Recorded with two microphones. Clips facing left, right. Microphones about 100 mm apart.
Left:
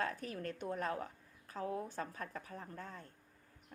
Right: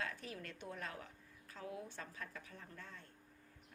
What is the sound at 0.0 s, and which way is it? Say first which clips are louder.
A woman's voice: left 6 dB; 45° left (ahead or behind).